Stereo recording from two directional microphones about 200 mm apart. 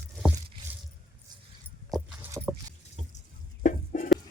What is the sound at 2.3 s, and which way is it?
Rowboat, 10° right (ahead or behind).